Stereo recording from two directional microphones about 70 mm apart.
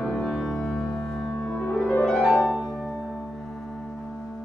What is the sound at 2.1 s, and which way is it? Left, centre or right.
Music, centre.